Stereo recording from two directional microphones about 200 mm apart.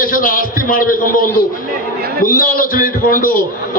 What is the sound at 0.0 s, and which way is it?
A man's voice, 45° left (ahead or behind).